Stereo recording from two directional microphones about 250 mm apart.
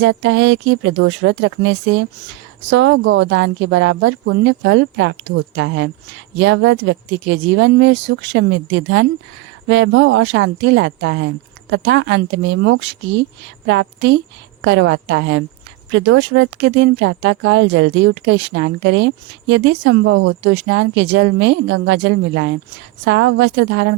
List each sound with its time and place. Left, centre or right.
0.0 s speech: right